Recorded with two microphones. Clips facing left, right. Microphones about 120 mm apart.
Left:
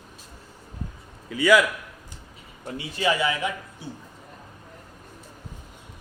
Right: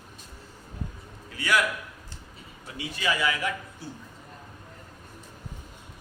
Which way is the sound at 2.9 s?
25° left (ahead or behind).